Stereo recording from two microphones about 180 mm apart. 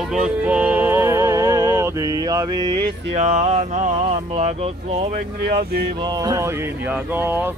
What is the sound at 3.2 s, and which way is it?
Speech, 40° right (ahead or behind).